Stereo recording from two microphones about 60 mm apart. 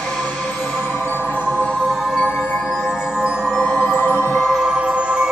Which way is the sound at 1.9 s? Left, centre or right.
Centre.